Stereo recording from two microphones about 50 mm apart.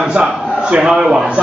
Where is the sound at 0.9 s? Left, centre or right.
Centre.